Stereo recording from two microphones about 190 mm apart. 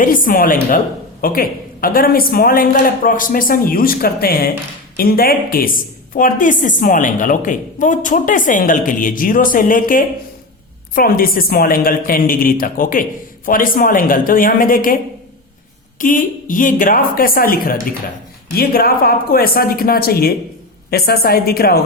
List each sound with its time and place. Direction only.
0.0 s a woman's voice: 45° left (ahead or behind)
16.0 s a woman's voice: 45° left (ahead or behind)